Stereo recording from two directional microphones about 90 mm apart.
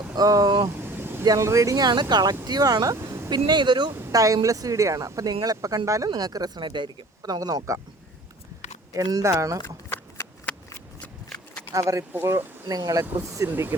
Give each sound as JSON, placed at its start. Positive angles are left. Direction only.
{"t": 0.2, "sound": "speech", "side_deg": -40}
{"t": 0.8, "sound": "vehicle", "side_deg": -25}
{"t": 1.2, "sound": "speech", "side_deg": -40}
{"t": 3.2, "sound": "speech", "side_deg": -50}
{"t": 4.1, "sound": "speech", "side_deg": -40}
{"t": 7.2, "sound": "speech", "side_deg": -45}
{"t": 8.9, "sound": "speech", "side_deg": -40}
{"t": 9.6, "sound": "shuffling cards", "side_deg": 25}
{"t": 11.7, "sound": "speech", "side_deg": -35}
{"t": 12.6, "sound": "speech", "side_deg": -45}
{"t": 13.5, "sound": "speech", "side_deg": -20}